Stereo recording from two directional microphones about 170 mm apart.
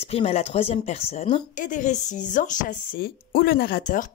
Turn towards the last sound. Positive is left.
turn(degrees=50)  # may be behind; listen again after turning